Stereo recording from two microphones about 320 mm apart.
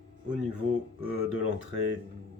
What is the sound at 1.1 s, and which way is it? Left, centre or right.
Speech, left.